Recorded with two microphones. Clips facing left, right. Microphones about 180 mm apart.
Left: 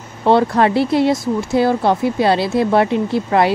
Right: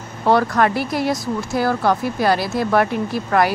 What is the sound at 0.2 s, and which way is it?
Speech, 25° left (ahead or behind).